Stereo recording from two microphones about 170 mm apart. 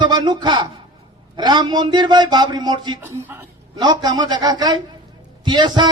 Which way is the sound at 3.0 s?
15° right (ahead or behind).